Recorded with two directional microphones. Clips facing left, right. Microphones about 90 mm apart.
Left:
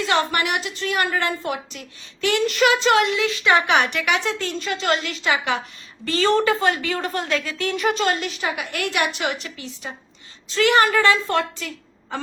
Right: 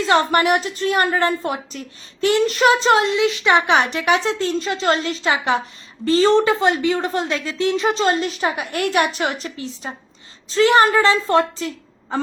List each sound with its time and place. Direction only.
0.0 s a woman's voice: 35° right (ahead or behind)
3.2 s a woman's voice: 20° right (ahead or behind)